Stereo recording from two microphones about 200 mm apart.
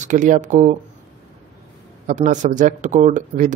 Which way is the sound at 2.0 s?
40° right (ahead or behind).